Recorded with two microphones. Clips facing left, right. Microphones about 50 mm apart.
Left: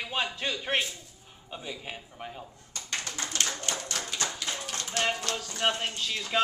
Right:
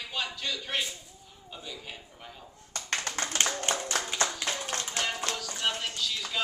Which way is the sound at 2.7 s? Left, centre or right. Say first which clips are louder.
Right 3 dB; right.